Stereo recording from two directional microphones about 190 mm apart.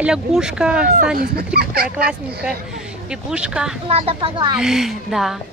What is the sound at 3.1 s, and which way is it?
Speech, 5° right (ahead or behind).